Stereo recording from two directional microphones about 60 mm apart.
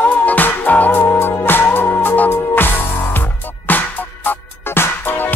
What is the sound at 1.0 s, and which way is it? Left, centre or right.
Music, left.